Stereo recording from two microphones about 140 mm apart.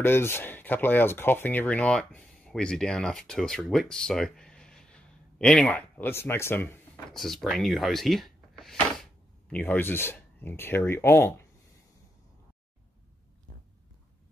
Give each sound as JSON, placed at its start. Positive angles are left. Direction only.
{"t": 0.0, "sound": "speech", "side_deg": 15}
{"t": 7.1, "sound": "speech", "side_deg": 0}